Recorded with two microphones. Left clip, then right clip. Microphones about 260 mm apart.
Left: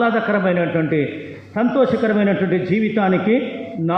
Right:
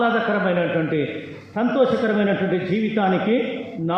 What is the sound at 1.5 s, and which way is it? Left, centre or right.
A man's voice, left.